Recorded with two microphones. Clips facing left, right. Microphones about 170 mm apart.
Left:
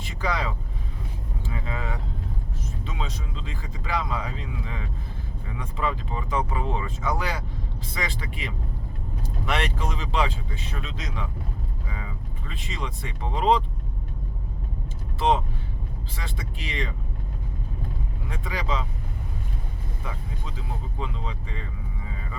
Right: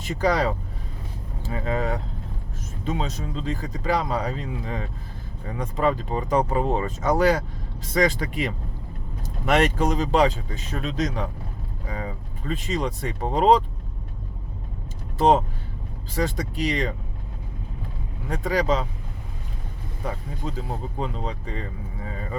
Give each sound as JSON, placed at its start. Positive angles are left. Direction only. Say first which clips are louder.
{"t": 0.0, "sound": "speech", "louder": "right 7 dB", "side_deg": -40}
{"t": 15.2, "sound": "speech", "louder": "right 5 dB", "side_deg": -40}
{"t": 18.3, "sound": "speech", "louder": "right 8 dB", "side_deg": -40}
{"t": 20.1, "sound": "speech", "louder": "right 8 dB", "side_deg": -40}